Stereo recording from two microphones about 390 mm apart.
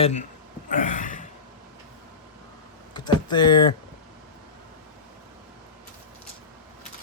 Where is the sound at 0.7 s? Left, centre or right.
Centre.